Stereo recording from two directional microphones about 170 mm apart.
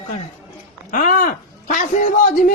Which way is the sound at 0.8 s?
50° left (ahead or behind).